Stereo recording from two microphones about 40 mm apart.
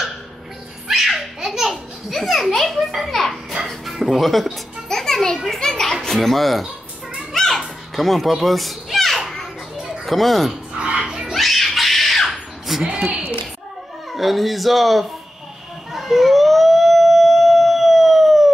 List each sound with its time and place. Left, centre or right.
0.8 s baby laughter: centre
1.6 s a sound: centre
2.1 s children playing: centre
3.9 s speech: centre
4.8 s music: centre
5.6 s children playing: centre
6.0 s speech: centre
7.3 s children playing: centre
10.0 s speech: centre
10.8 s a sound: right
11.3 s screaming: centre
12.8 s a woman's voice: right
14.1 s speech: centre
15.9 s siren: centre